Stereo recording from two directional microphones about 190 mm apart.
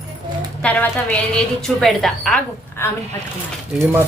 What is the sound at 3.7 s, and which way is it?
Speech, 10° right (ahead or behind).